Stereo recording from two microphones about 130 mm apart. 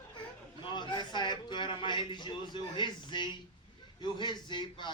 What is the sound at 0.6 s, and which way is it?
A man's voice, 35° left (ahead or behind).